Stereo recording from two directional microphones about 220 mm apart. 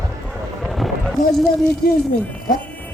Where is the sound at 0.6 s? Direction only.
Centre (ahead or behind).